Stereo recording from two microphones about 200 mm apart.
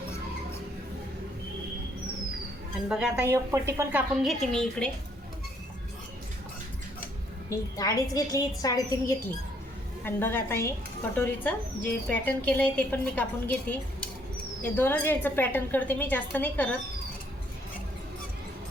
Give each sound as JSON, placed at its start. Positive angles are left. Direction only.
{"t": 2.9, "sound": "speech", "side_deg": -5}
{"t": 4.2, "sound": "a woman's voice", "side_deg": 0}
{"t": 7.5, "sound": "a woman's voice", "side_deg": 20}